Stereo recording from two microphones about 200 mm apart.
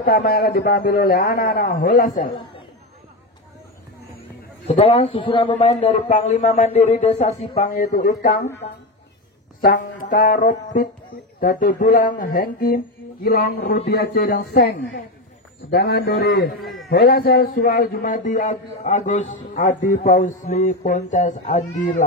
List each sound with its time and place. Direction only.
0.0 s speech: 50° left (ahead or behind)
4.6 s speech: 30° left (ahead or behind)
9.6 s speech: 45° left (ahead or behind)